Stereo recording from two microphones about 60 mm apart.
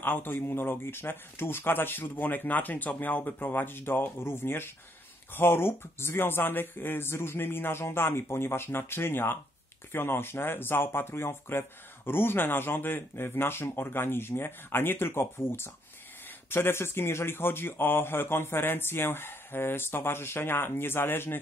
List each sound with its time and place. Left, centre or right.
0.0 s speech: left